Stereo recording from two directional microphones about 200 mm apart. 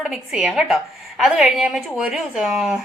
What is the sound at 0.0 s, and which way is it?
A woman's voice, 5° right (ahead or behind).